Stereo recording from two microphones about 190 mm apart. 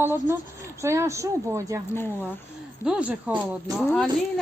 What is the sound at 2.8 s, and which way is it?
A woman's voice, 5° right (ahead or behind).